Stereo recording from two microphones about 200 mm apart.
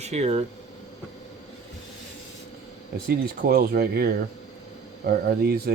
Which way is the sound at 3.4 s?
50° right (ahead or behind).